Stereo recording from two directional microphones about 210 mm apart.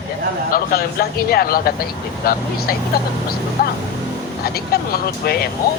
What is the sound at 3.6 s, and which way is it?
A woman's voice, 45° left (ahead or behind).